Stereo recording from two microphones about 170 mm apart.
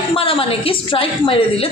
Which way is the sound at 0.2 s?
35° left (ahead or behind).